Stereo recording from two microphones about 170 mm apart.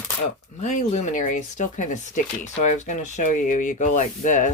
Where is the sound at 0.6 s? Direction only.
45° left (ahead or behind).